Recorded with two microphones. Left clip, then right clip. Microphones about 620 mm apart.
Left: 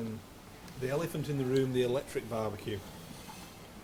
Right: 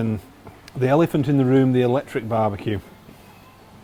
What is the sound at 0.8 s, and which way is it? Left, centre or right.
Speech, right.